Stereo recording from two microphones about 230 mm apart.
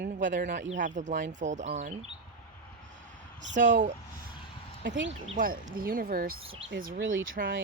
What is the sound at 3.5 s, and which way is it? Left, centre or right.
Speech, right.